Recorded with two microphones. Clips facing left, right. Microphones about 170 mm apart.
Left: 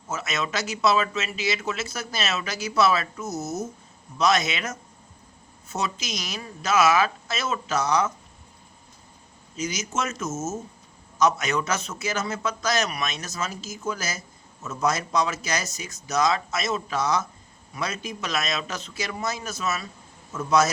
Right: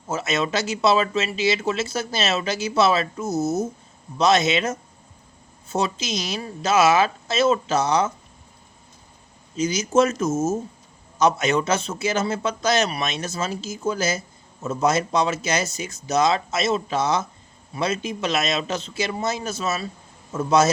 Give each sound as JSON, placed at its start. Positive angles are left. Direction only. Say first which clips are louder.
{"t": 0.1, "sound": "speech", "louder": "right 5 dB", "side_deg": -30}
{"t": 9.6, "sound": "speech", "louder": "right 10 dB", "side_deg": -30}